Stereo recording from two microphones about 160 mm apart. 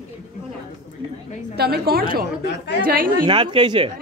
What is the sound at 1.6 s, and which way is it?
A woman's voice, 75° right (ahead or behind).